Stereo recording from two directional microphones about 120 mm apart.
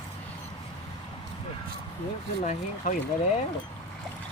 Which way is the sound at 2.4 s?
90° left.